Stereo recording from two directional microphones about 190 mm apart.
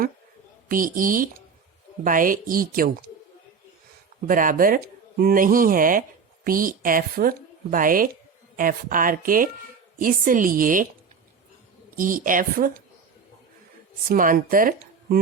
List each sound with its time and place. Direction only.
0.7 s speech: 45° right (ahead or behind)
4.3 s speech: 45° right (ahead or behind)
11.9 s speech: 45° right (ahead or behind)
14.1 s speech: 45° right (ahead or behind)